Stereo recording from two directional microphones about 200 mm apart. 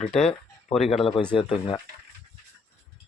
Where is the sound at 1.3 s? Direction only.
25° left (ahead or behind).